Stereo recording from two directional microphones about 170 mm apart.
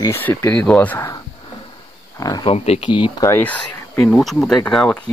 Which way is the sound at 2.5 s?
35° left (ahead or behind).